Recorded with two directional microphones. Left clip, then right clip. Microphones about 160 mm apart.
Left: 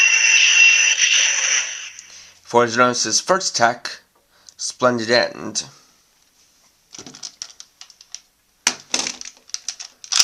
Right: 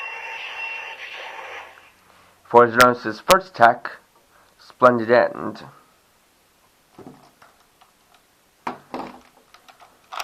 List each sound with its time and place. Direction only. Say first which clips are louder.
0.0 s a sound: left 18 dB; 15° left (ahead or behind)
1.1 s frog: left 17 dB; 30° left (ahead or behind)
2.5 s speech: right 2 dB; 30° left (ahead or behind)
6.9 s patter: left 9 dB; 25° left (ahead or behind)
8.7 s crushing: left 8 dB; 20° left (ahead or behind)